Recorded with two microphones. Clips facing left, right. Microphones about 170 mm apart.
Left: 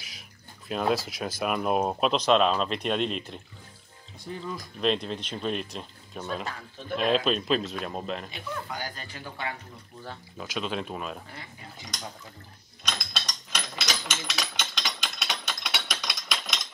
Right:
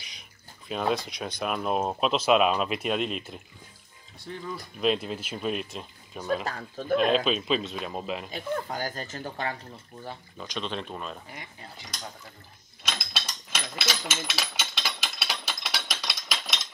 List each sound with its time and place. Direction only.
0.7 s speech: centre (ahead or behind)
4.7 s speech: 5° right (ahead or behind)
6.4 s speech: 40° right (ahead or behind)
7.0 s speech: centre (ahead or behind)
8.3 s speech: 45° right (ahead or behind)
10.3 s speech: 5° left (ahead or behind)
12.8 s a sound: 5° right (ahead or behind)